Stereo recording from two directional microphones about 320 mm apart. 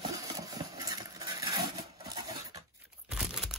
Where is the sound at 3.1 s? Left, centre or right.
Centre.